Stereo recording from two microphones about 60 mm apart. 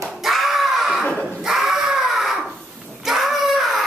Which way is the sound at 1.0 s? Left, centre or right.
Centre.